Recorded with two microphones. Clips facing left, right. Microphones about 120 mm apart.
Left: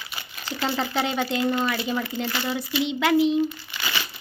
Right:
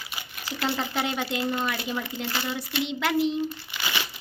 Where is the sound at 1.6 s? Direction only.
Centre (ahead or behind).